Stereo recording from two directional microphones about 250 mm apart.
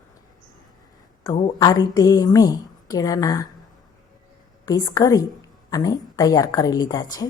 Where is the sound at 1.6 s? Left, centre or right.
Centre.